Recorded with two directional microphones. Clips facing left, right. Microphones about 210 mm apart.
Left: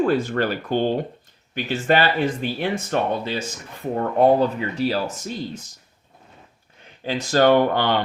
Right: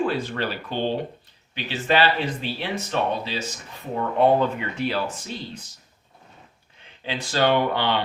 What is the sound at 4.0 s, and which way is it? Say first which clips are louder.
Speech: left 2 dB; 40° left (ahead or behind).